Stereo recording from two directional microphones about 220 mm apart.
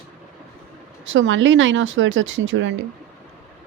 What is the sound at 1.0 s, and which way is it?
Speech, 60° right (ahead or behind).